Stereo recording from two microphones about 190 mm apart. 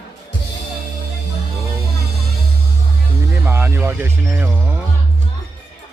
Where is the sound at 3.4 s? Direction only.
10° right (ahead or behind).